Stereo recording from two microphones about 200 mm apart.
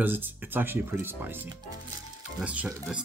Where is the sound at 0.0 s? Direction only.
10° right (ahead or behind).